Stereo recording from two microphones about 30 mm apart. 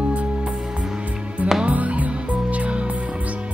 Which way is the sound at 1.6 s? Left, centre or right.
Right.